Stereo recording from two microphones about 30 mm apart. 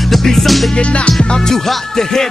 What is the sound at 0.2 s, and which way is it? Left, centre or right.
Music, centre.